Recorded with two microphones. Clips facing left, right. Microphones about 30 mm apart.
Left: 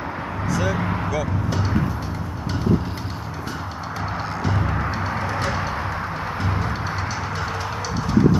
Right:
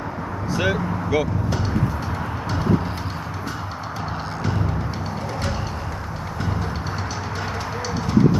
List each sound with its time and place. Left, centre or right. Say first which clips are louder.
0.6 s speech: right 2 dB; right